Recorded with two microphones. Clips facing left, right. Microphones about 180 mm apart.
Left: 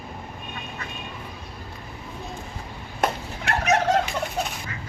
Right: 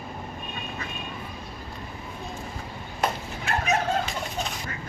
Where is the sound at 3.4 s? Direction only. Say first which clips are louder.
Left 4 dB; 75° left (ahead or behind).